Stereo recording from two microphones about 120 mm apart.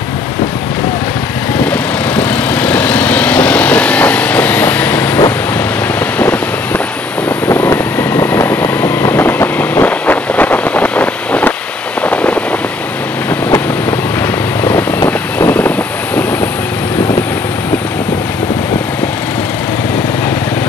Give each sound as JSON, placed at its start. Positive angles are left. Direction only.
{"t": 1.6, "sound": "vehicle", "side_deg": 10}
{"t": 7.4, "sound": "vehicle", "side_deg": 20}
{"t": 12.0, "sound": "a sound", "side_deg": 10}
{"t": 14.6, "sound": "vehicle", "side_deg": 15}